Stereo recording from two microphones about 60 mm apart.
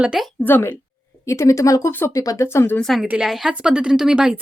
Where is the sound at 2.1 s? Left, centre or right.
Left.